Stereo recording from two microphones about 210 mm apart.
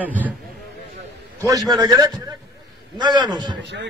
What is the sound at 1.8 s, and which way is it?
A man's voice, 15° right (ahead or behind).